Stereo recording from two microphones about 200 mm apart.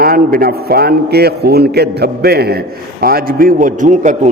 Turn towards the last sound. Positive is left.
turn(degrees=-40)  # may be behind; listen again after turning